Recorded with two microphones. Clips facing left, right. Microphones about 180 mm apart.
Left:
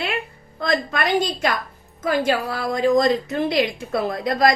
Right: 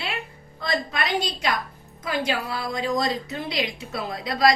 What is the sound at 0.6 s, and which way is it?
A woman's voice, 50° left (ahead or behind).